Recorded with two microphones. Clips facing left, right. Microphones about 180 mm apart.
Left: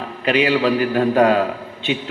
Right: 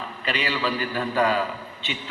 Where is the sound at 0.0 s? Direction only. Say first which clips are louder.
Left 10 dB; 50° left (ahead or behind).